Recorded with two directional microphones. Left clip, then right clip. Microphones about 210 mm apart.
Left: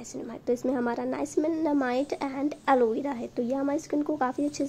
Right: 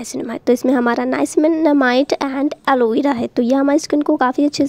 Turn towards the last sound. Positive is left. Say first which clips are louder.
# right 12 dB
turn(degrees=-40)  # may be behind; listen again after turning